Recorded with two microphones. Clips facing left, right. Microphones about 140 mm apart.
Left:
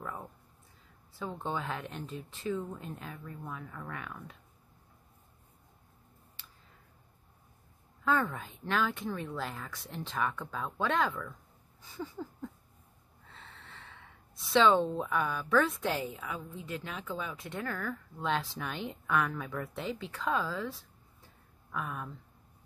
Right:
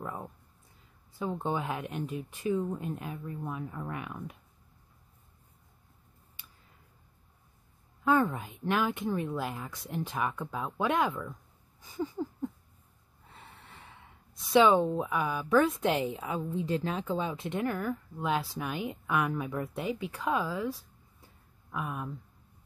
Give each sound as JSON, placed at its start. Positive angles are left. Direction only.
{"t": 0.0, "sound": "a sound", "side_deg": -20}
{"t": 1.2, "sound": "speech", "side_deg": -20}
{"t": 8.0, "sound": "speech", "side_deg": -15}
{"t": 12.0, "sound": "a sound", "side_deg": -15}
{"t": 13.3, "sound": "gasp", "side_deg": -15}
{"t": 14.5, "sound": "speech", "side_deg": -15}
{"t": 16.2, "sound": "a woman's voice", "side_deg": -30}
{"t": 21.7, "sound": "speech", "side_deg": -10}